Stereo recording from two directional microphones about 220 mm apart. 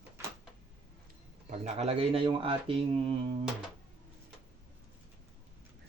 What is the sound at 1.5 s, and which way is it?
Speech, 30° right (ahead or behind).